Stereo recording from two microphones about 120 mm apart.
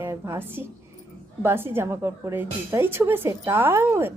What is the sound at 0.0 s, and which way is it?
A woman's voice, 20° right (ahead or behind).